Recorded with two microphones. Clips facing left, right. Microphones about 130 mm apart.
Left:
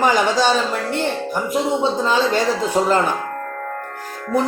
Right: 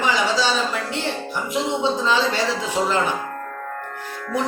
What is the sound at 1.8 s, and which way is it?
Music, 50° left (ahead or behind).